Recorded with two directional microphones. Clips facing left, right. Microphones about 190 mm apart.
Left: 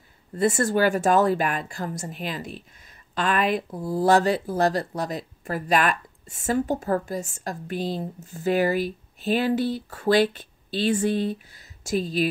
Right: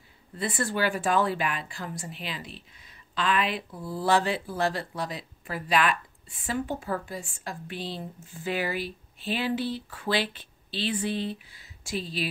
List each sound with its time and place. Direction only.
0.3 s speech: 45° left (ahead or behind)